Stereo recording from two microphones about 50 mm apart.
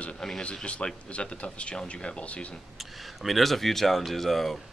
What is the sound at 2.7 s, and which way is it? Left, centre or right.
Speech, centre.